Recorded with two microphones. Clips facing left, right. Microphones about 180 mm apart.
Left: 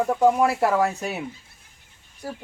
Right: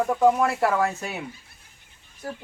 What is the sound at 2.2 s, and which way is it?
Speech, 10° left (ahead or behind).